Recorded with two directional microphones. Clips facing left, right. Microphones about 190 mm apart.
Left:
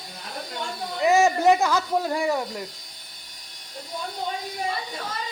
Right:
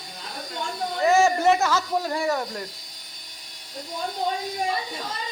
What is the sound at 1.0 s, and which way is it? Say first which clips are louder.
Speech: even; 15° left (ahead or behind).